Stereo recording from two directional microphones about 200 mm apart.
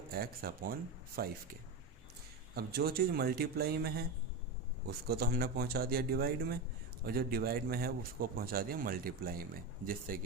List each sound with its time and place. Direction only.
0.1 s a man's voice: 50° right (ahead or behind)
2.6 s a man's voice: 50° right (ahead or behind)